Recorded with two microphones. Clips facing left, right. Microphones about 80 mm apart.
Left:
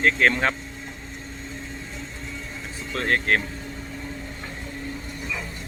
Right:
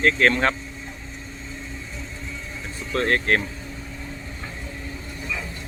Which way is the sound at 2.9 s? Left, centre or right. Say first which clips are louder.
Right 2 dB; centre.